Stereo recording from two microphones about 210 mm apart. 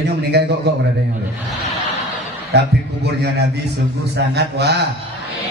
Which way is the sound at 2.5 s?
50° right (ahead or behind).